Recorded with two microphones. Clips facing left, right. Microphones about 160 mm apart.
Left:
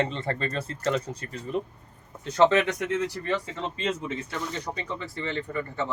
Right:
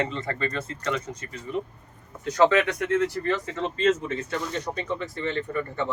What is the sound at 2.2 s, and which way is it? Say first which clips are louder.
Speech: right 1 dB; 25° left (ahead or behind).